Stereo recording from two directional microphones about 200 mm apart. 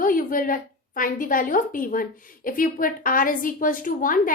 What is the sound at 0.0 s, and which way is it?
A woman's voice, 45° left (ahead or behind).